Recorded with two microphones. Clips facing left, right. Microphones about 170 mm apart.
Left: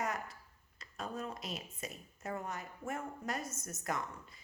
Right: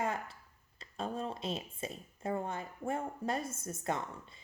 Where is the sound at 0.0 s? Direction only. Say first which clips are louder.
Right 3 dB; 30° right (ahead or behind).